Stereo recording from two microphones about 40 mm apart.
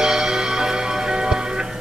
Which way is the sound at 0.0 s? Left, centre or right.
Centre.